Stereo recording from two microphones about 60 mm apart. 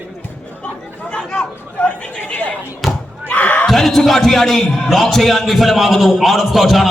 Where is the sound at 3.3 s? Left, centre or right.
Left.